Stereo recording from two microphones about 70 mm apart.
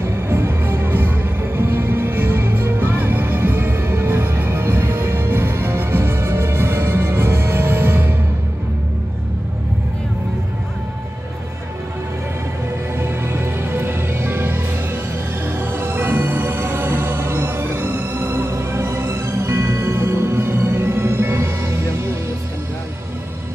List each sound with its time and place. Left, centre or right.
0.3 s music: right
13.0 s music: right